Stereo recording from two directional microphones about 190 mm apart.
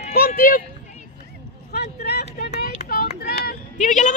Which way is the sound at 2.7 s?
45° left (ahead or behind).